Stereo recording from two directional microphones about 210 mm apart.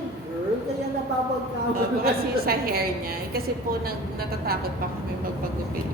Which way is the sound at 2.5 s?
45° right (ahead or behind).